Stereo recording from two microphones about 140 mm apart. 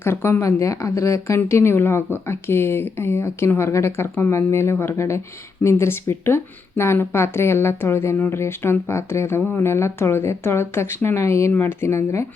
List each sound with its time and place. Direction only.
0.0 s speech: 15° left (ahead or behind)